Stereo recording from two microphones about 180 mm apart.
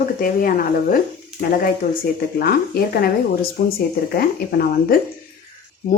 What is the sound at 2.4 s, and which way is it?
Speech, 60° left (ahead or behind).